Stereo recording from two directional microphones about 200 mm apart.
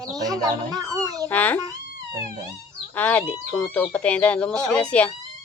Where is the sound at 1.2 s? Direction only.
10° left (ahead or behind).